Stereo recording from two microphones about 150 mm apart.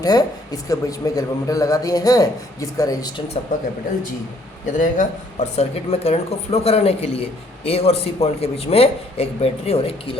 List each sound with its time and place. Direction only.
0.0 s a man's voice: 25° left (ahead or behind)
4.8 s speech: 55° left (ahead or behind)